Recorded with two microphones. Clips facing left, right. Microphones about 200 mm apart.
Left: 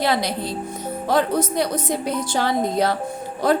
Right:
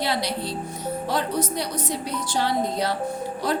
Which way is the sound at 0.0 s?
50° left (ahead or behind).